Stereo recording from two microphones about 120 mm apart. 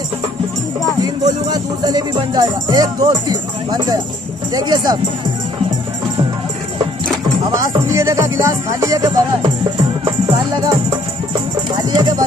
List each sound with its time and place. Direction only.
1.0 s music: 35° right (ahead or behind)
4.6 s speech: 35° right (ahead or behind)
7.5 s speech: 30° right (ahead or behind)